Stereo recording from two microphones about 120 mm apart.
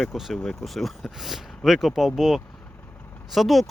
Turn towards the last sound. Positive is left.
turn(degrees=0)  # may be behind; listen again after turning